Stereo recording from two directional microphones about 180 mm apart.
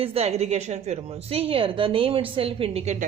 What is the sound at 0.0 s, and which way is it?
A woman's voice, 35° right (ahead or behind).